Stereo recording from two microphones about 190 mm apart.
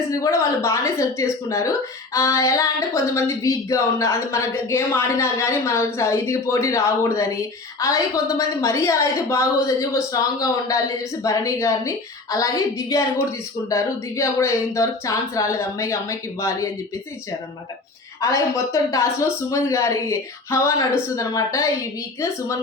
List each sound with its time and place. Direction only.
0.1 s speech: 15° left (ahead or behind)
18.2 s speech: 15° left (ahead or behind)